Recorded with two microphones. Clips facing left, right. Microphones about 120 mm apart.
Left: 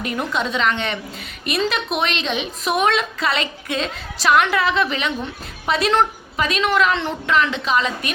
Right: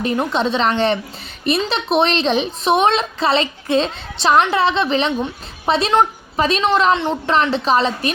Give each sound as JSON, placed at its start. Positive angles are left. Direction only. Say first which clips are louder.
{"t": 0.0, "sound": "a woman's voice", "louder": "right 5 dB", "side_deg": -30}
{"t": 7.3, "sound": "a woman's voice", "louder": "right 3 dB", "side_deg": -35}